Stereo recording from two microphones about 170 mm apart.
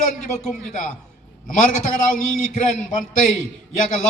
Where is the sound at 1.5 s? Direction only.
45° left (ahead or behind).